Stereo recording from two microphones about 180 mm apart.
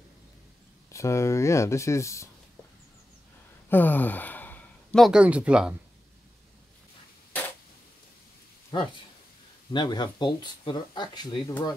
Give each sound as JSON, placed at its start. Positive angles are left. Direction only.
{"t": 0.8, "sound": "speech", "side_deg": 15}
{"t": 3.7, "sound": "speech", "side_deg": 10}
{"t": 8.7, "sound": "speech", "side_deg": 25}